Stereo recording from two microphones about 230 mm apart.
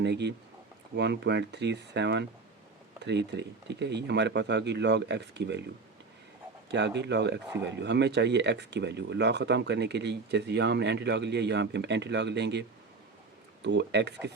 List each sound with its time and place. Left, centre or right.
0.0 s speech: right
6.7 s speech: right
13.7 s speech: right